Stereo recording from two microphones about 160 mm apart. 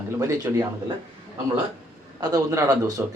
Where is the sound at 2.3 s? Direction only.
20° right (ahead or behind).